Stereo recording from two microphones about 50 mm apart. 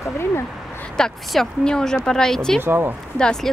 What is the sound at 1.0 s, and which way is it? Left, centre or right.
Speech, centre.